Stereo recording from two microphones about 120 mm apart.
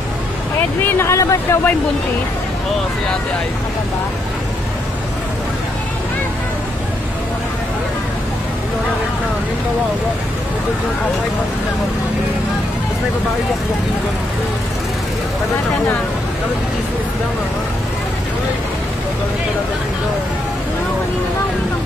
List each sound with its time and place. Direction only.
0.8 s speech: 20° left (ahead or behind)